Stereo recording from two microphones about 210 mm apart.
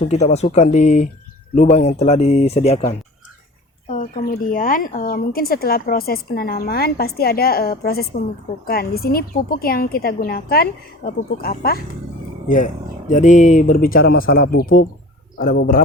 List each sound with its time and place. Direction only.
0.0 s speech: 30° left (ahead or behind)
3.8 s speech: 35° left (ahead or behind)